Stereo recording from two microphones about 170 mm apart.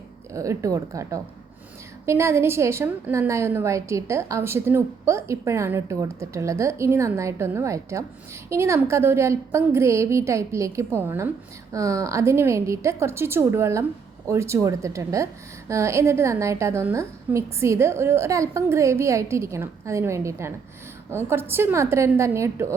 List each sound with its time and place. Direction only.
0.3 s a woman's voice: 20° right (ahead or behind)